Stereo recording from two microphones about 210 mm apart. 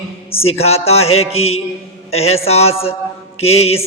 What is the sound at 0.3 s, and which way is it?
A man's voice, 30° left (ahead or behind).